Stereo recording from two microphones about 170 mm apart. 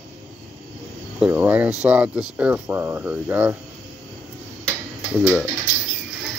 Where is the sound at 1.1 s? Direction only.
10° right (ahead or behind).